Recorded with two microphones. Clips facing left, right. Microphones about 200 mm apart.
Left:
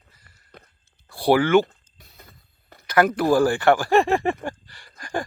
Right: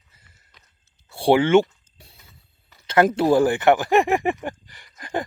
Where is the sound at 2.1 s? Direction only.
55° left (ahead or behind).